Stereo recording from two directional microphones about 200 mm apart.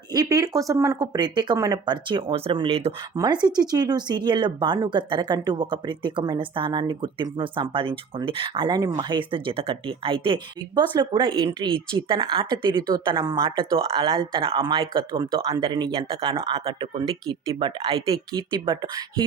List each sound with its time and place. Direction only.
0.1 s speech: 20° right (ahead or behind)